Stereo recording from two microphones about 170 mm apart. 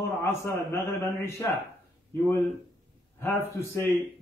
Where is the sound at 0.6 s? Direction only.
15° left (ahead or behind).